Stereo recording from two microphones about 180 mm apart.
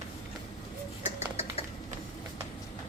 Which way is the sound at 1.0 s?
35° left (ahead or behind).